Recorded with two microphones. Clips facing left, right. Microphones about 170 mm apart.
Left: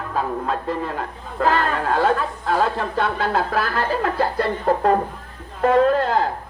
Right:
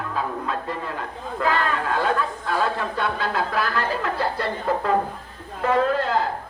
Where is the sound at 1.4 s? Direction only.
45° left (ahead or behind).